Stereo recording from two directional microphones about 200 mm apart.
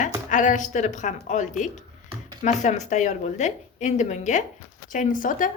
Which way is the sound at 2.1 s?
25° right (ahead or behind).